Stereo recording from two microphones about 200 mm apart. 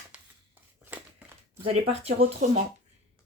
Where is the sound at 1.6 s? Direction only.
30° right (ahead or behind).